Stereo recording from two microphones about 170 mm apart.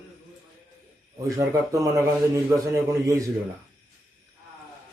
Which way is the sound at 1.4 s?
20° right (ahead or behind).